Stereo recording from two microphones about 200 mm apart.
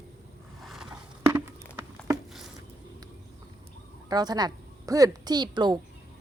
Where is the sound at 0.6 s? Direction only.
Centre (ahead or behind).